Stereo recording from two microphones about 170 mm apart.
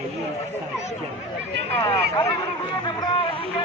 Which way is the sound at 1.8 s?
30° left (ahead or behind).